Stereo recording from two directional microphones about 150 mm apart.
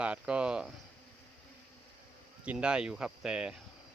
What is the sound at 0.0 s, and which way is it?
Cricket, 5° right (ahead or behind).